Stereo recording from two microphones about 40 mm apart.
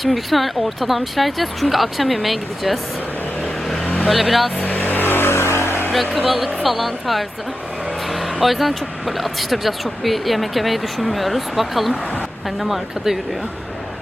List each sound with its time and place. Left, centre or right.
0.0 s speech: centre
4.1 s speech: centre
4.6 s vehicle: left
6.2 s speech: centre